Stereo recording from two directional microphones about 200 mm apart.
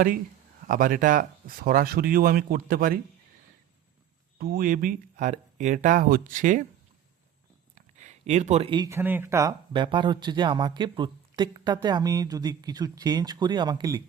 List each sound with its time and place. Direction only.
0.7 s speech: 45° right (ahead or behind)
4.4 s speech: 50° right (ahead or behind)
7.8 s speech: 35° right (ahead or behind); by 14.0 s 20° right (ahead or behind)